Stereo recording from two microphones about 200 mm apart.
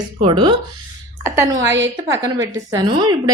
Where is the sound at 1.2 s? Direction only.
10° right (ahead or behind).